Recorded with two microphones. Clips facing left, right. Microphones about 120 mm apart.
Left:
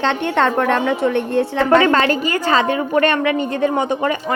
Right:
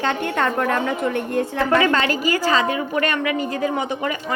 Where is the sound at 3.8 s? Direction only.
50° left (ahead or behind).